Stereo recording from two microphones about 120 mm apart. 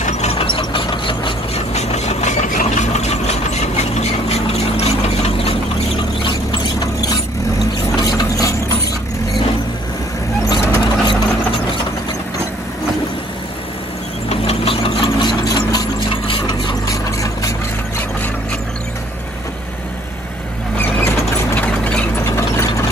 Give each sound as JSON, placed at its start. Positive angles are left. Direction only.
{"t": 0.0, "sound": "ratchet", "side_deg": 65}
{"t": 0.6, "sound": "ratchet", "side_deg": 45}
{"t": 1.5, "sound": "engine", "side_deg": 65}
{"t": 7.9, "sound": "ratchet", "side_deg": 30}
{"t": 10.4, "sound": "vehicle", "side_deg": 25}
{"t": 14.3, "sound": "engine", "side_deg": 55}
{"t": 20.8, "sound": "vehicle", "side_deg": 15}
{"t": 22.2, "sound": "ratchet", "side_deg": 25}